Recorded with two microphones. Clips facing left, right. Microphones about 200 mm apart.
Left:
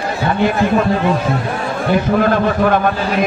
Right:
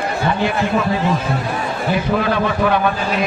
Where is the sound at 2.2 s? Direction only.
50° left (ahead or behind).